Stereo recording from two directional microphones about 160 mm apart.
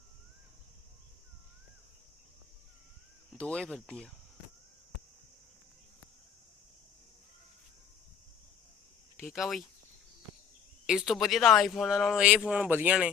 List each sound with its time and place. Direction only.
3.3 s speech: 5° left (ahead or behind)
9.2 s speech: centre (ahead or behind)
10.8 s speech: centre (ahead or behind)